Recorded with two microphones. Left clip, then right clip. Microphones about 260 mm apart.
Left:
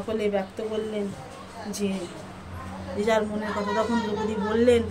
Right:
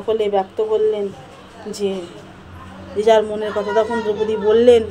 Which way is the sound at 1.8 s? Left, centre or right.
Centre.